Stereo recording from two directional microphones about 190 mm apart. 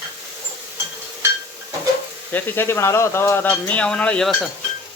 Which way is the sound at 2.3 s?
10° left (ahead or behind).